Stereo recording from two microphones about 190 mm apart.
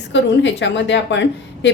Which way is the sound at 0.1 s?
70° left (ahead or behind).